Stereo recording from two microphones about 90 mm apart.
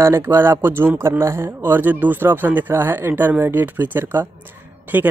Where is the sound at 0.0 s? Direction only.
30° right (ahead or behind).